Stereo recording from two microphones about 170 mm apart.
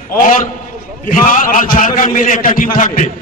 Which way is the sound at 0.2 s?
50° left (ahead or behind).